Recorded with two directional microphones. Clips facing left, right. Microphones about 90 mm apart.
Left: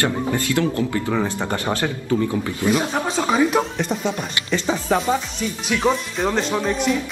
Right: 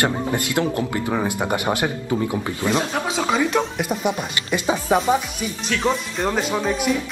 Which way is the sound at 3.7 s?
10° right (ahead or behind).